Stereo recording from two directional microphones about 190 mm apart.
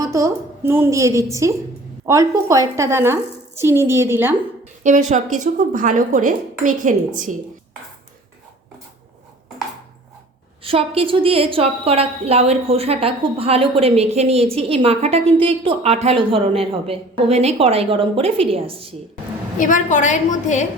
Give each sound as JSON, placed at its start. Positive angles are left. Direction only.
{"t": 0.0, "sound": "a woman's voice", "side_deg": -15}
{"t": 4.8, "sound": "speech", "side_deg": -40}
{"t": 10.6, "sound": "a woman's voice", "side_deg": -30}
{"t": 19.5, "sound": "a woman's voice", "side_deg": 40}